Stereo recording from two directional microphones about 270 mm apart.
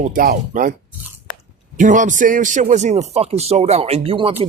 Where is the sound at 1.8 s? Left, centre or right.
Right.